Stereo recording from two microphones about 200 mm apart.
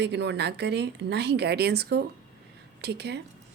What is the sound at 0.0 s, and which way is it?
A woman's voice, 60° right (ahead or behind).